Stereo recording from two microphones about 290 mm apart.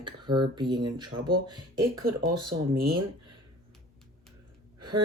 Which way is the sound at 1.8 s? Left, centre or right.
Right.